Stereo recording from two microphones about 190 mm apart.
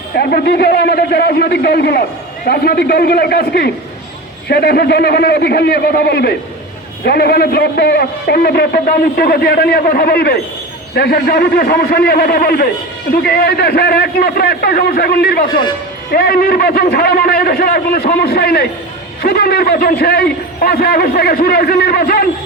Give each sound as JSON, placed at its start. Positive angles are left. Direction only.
{"t": 0.2, "sound": "a man's voice", "side_deg": 55}